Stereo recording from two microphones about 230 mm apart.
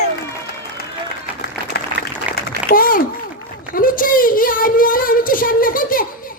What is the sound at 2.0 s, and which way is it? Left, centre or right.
Applause, right.